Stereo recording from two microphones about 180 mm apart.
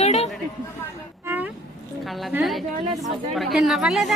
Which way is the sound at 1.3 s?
10° right (ahead or behind).